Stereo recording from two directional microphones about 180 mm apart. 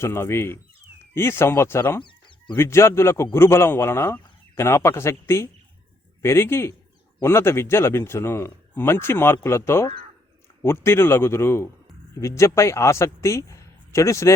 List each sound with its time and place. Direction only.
0.0 s speech: 15° left (ahead or behind)
2.0 s chicken: 25° left (ahead or behind)
2.6 s a man's voice: 15° left (ahead or behind)